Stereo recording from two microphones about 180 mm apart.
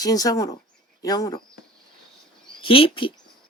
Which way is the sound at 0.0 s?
20° left (ahead or behind).